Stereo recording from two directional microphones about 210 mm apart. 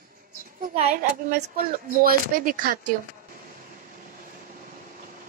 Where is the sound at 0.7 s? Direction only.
30° right (ahead or behind).